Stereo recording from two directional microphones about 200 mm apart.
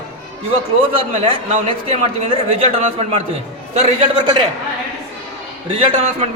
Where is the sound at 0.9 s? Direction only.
25° right (ahead or behind).